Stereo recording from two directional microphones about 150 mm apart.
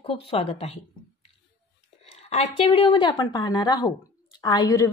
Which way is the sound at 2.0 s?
45° left (ahead or behind).